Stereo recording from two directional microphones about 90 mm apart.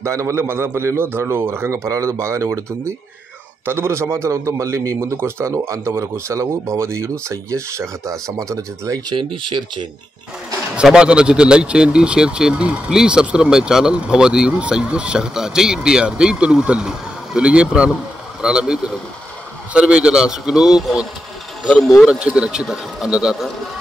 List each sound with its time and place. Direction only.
0.0 s a man's voice: 35° right (ahead or behind)
9.1 s speech: 70° right (ahead or behind)
10.8 s speech: 10° right (ahead or behind)
21.6 s speech: 5° left (ahead or behind)
22.0 s speech: 10° right (ahead or behind)